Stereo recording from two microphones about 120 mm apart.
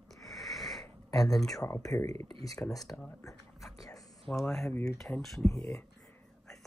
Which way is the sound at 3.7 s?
30° left (ahead or behind).